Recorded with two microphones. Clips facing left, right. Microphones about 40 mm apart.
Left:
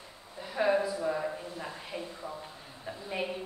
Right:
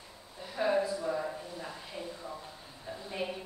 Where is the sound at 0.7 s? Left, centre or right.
Left.